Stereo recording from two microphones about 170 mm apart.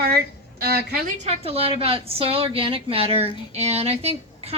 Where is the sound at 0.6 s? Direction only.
65° right (ahead or behind).